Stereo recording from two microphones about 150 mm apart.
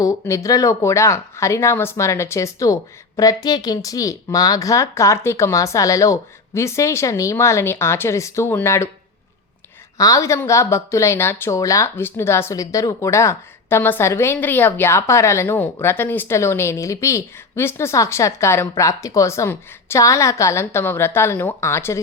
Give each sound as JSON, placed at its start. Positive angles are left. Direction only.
{"t": 0.0, "sound": "a woman's voice", "side_deg": 20}
{"t": 10.0, "sound": "a woman's voice", "side_deg": 20}